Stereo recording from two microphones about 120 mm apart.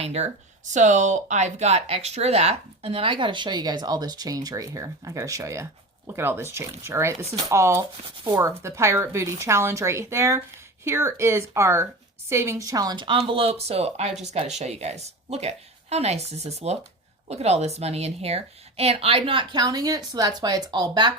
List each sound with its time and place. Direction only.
0.0 s speech: 65° right (ahead or behind); by 7.2 s 20° right (ahead or behind)
7.2 s a woman's voice: 60° right (ahead or behind)
7.4 s speech: 25° right (ahead or behind)
8.0 s speech: 40° right (ahead or behind)
8.4 s a woman's voice: 25° right (ahead or behind)